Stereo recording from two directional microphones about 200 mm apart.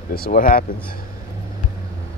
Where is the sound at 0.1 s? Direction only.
45° left (ahead or behind).